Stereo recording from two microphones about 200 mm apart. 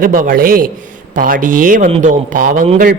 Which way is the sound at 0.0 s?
45° right (ahead or behind).